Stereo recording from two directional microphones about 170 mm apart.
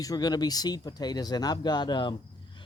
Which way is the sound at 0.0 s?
20° left (ahead or behind).